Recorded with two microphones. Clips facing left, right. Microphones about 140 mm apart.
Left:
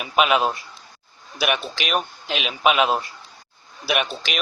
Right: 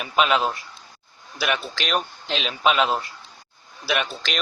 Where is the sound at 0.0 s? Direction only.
10° left (ahead or behind).